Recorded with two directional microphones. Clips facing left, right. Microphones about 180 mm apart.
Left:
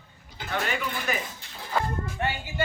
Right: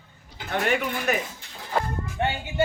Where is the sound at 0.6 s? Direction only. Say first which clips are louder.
Right 8 dB; 60° right (ahead or behind).